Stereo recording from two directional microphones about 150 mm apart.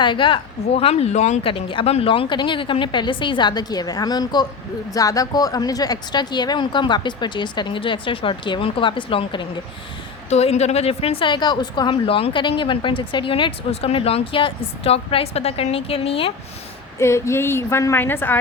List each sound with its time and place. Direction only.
0.0 s a woman's voice: 35° left (ahead or behind)
10.2 s a woman's voice: 45° left (ahead or behind)
17.0 s a woman's voice: 20° left (ahead or behind)